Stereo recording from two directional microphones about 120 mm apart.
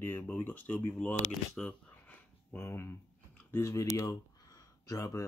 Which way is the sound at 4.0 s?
25° left (ahead or behind).